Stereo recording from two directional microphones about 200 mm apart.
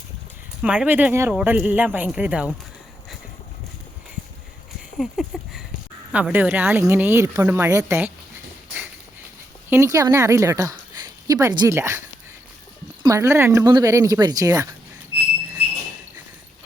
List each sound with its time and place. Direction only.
0.6 s speech: 5° right (ahead or behind)
4.9 s a sound: centre (ahead or behind)
6.1 s speech: 5° right (ahead or behind)
9.6 s speech: 15° right (ahead or behind)